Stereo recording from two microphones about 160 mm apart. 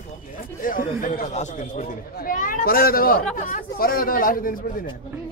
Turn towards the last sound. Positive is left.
turn(degrees=60)  # may be behind; listen again after turning